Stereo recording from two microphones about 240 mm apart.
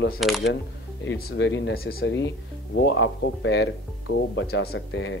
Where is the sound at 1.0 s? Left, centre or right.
Left.